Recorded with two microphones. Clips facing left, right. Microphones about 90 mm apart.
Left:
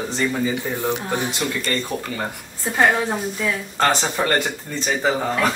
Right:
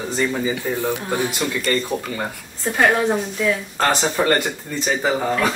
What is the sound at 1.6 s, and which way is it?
Speech, centre (ahead or behind).